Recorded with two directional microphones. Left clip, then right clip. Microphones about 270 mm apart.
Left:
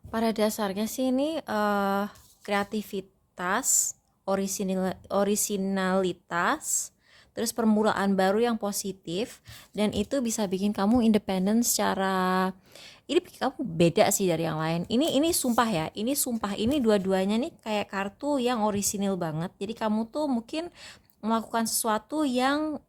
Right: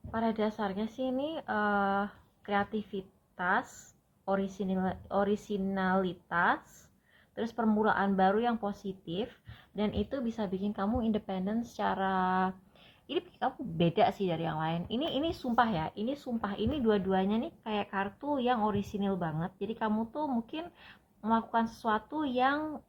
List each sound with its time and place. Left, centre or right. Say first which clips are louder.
0.1 s speech: left 5 dB; left